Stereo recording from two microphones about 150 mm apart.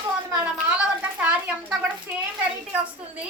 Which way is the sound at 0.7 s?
10° right (ahead or behind).